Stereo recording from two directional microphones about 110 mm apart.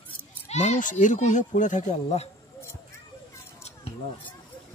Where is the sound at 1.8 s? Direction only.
75° left (ahead or behind).